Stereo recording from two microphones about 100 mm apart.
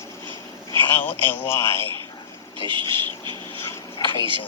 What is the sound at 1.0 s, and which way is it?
Speech, 20° left (ahead or behind).